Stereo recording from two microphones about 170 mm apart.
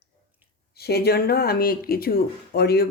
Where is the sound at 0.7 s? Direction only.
70° left (ahead or behind).